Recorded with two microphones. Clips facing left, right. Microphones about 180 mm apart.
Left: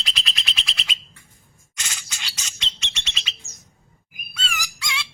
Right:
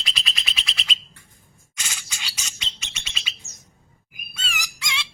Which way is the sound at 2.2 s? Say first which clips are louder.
Even; 10° right (ahead or behind).